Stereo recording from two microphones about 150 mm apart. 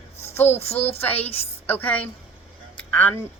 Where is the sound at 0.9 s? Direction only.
10° left (ahead or behind).